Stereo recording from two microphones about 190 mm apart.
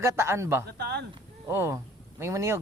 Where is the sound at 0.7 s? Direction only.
60° right (ahead or behind).